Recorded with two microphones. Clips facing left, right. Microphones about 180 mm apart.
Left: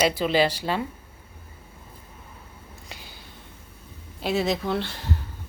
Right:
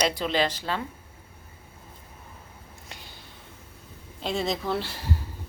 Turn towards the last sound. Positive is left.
turn(degrees=-5)  # may be behind; listen again after turning